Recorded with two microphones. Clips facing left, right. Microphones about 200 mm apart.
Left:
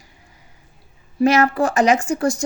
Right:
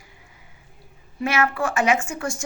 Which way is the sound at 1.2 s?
40° left (ahead or behind).